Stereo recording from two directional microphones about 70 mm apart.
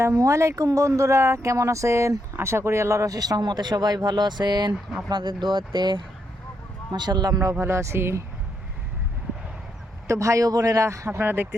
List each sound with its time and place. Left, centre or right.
0.0 s speech: right
3.2 s speech: right
7.6 s speech: right
10.1 s speech: right